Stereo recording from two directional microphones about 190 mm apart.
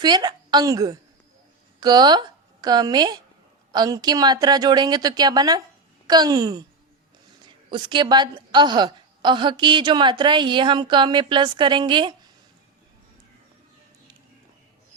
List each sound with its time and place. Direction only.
0.0 s a woman's voice: 20° right (ahead or behind)
7.7 s a woman's voice: 25° right (ahead or behind)